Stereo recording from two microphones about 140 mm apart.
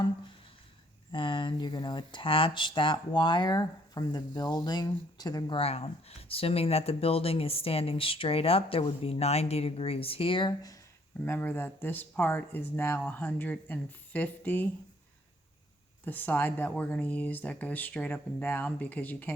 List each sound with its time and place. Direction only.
1.1 s speech: 35° left (ahead or behind)
5.5 s speech: 45° left (ahead or behind)
11.3 s speech: 15° left (ahead or behind)
16.0 s speech: 15° left (ahead or behind)